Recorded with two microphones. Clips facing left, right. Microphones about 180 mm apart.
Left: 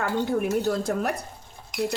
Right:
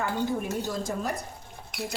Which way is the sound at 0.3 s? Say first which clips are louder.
Left 6 dB; 65° left (ahead or behind).